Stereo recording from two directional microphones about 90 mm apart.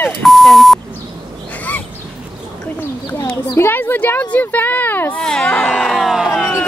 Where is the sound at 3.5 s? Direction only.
25° left (ahead or behind).